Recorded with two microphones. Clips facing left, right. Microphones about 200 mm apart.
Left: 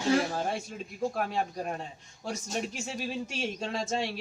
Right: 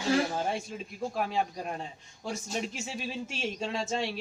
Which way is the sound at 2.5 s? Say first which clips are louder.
Left 2 dB; centre (ahead or behind).